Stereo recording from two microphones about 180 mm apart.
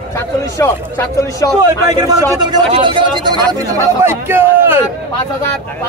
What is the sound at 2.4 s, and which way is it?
Speech, 25° right (ahead or behind).